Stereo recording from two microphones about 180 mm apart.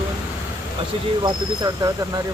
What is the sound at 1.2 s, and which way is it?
Speech, 20° right (ahead or behind).